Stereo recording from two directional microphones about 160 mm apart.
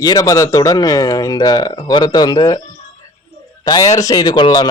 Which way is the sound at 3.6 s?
25° left (ahead or behind).